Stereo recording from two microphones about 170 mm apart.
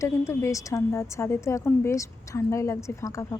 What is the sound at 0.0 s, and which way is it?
Speech, 15° left (ahead or behind).